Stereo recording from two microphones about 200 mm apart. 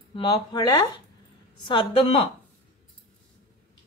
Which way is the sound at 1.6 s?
25° left (ahead or behind).